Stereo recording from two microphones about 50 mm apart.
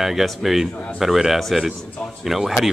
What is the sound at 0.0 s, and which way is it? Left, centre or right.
Speech, centre.